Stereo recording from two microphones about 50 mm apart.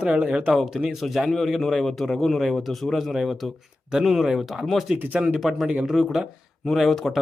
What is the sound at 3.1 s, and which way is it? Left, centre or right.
A man's voice, centre.